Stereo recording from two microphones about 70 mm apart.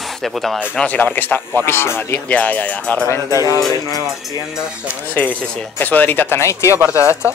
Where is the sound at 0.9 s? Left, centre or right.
Left.